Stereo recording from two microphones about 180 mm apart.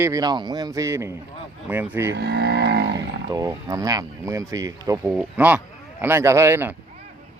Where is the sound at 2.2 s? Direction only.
65° right (ahead or behind).